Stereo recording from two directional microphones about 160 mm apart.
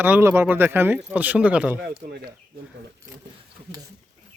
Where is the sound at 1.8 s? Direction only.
80° right.